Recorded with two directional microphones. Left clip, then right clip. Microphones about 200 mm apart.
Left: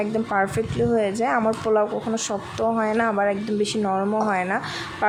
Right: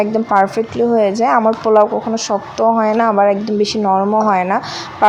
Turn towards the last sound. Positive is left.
turn(degrees=-15)  # may be behind; listen again after turning